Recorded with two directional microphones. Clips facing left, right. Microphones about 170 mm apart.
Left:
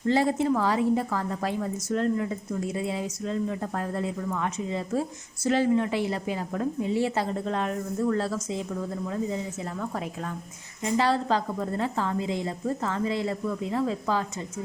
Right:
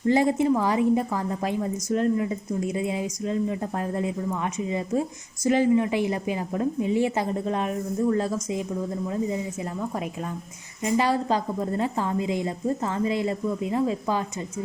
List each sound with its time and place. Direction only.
0.1 s a woman's voice: 15° right (ahead or behind)
10.8 s a woman's voice: 15° right (ahead or behind)